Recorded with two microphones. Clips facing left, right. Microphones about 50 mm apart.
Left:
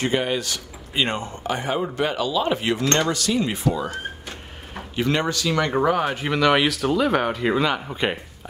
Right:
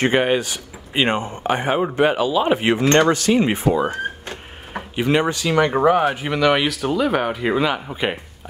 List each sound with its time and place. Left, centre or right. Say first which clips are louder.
0.0 s speech: right 5 dB; right
0.4 s speech: right 3 dB; right
4.9 s speech: right 4 dB; centre
6.1 s speech: right 1 dB; centre